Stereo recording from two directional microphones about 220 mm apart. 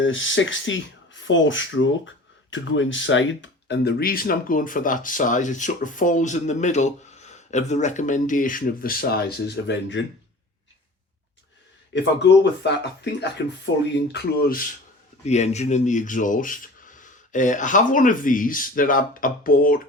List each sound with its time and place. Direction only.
0.0 s speech: 60° left (ahead or behind)
12.2 s speech: 50° left (ahead or behind)
15.2 s speech: 30° left (ahead or behind)